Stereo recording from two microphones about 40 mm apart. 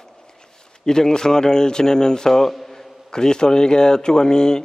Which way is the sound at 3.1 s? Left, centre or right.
Centre.